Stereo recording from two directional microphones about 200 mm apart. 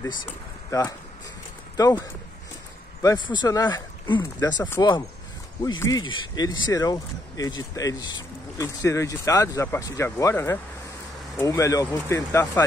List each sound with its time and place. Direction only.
0.7 s speech: 15° left (ahead or behind)